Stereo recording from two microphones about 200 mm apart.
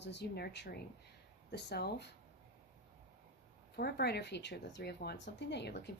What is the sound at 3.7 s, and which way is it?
Speech, 55° left (ahead or behind).